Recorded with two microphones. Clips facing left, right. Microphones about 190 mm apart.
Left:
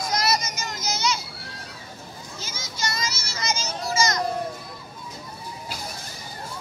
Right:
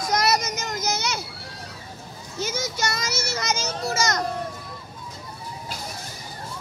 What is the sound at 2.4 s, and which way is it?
Children playing, 65° right (ahead or behind).